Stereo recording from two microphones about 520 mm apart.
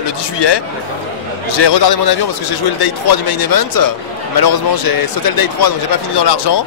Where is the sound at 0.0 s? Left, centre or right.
Left.